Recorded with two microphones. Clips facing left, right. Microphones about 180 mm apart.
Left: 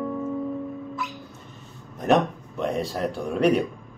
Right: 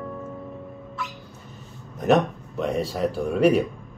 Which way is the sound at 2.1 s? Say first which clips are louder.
Right 1 dB; centre (ahead or behind).